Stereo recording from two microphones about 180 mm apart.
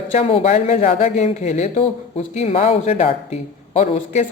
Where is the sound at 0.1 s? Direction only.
35° left (ahead or behind).